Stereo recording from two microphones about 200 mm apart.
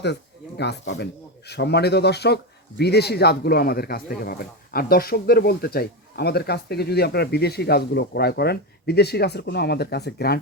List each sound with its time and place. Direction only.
0.0 s speech: 55° left (ahead or behind)